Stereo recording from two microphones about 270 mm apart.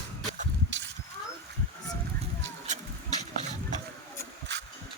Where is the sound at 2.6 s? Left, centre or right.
Right.